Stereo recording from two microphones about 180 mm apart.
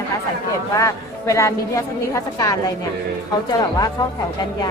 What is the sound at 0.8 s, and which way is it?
A woman's voice, 15° left (ahead or behind).